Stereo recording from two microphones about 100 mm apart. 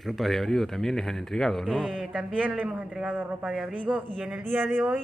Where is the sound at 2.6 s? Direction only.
10° right (ahead or behind).